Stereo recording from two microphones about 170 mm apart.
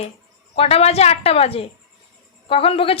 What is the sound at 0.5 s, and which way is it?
A woman's voice, 35° left (ahead or behind).